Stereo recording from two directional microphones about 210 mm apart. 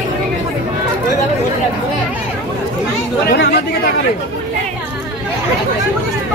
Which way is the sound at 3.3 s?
50° left (ahead or behind).